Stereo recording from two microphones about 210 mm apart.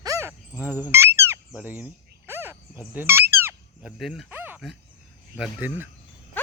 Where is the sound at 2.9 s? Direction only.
10° right (ahead or behind).